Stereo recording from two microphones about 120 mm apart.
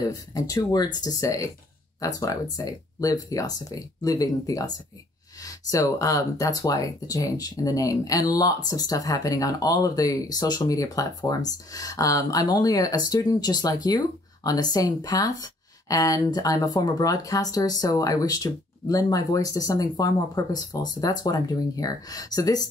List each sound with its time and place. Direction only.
0.0 s speech: 30° left (ahead or behind)